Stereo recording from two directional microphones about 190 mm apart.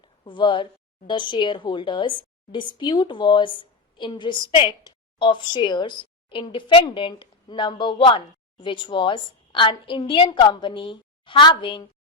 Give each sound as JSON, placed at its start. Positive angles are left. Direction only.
{"t": 0.0, "sound": "a woman's voice", "side_deg": 25}